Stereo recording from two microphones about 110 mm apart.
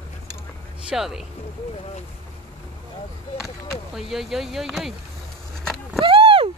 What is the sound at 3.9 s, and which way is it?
Speech, centre (ahead or behind).